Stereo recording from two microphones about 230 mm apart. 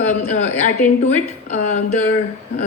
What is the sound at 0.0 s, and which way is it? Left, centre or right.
Speech, left.